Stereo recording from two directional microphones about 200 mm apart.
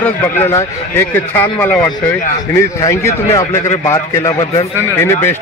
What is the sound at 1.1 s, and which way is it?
A man's voice, 10° left (ahead or behind).